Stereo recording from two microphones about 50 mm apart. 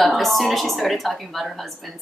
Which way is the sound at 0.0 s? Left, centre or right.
Centre.